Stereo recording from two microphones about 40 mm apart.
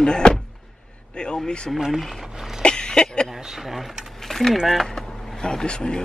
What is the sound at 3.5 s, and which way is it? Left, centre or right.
Speech, centre.